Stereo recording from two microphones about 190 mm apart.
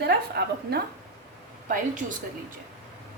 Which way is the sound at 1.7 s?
45° right (ahead or behind).